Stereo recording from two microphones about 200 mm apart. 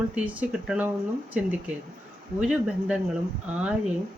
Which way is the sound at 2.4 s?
5° right (ahead or behind).